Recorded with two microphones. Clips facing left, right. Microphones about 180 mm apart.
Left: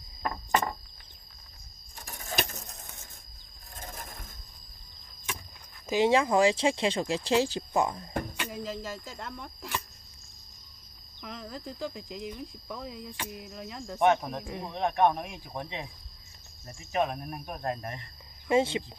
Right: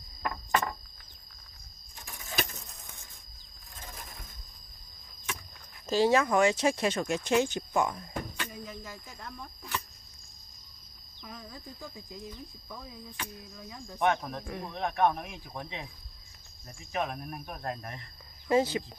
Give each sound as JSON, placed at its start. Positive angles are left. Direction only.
{"t": 0.2, "sound": "a sound", "side_deg": 30}
{"t": 2.0, "sound": "a sound", "side_deg": 40}
{"t": 5.9, "sound": "speech", "side_deg": 20}
{"t": 6.1, "sound": "speech", "side_deg": 30}
{"t": 8.5, "sound": "speech", "side_deg": 90}
{"t": 11.2, "sound": "speech", "side_deg": 75}
{"t": 13.9, "sound": "speech", "side_deg": 20}
{"t": 16.9, "sound": "speech", "side_deg": 25}